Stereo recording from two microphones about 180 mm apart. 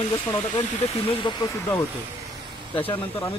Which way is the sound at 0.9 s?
30° left (ahead or behind).